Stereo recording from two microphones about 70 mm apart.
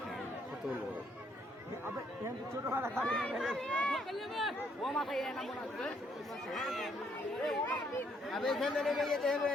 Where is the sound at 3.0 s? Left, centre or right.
Centre.